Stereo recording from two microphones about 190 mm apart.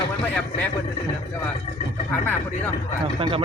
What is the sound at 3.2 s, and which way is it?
Speech, 30° right (ahead or behind).